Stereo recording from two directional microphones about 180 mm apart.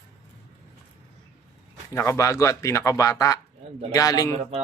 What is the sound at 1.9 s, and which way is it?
A man's voice, 15° left (ahead or behind).